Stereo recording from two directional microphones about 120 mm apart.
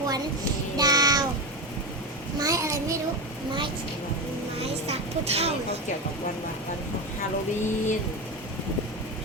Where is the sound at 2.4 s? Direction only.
25° right (ahead or behind).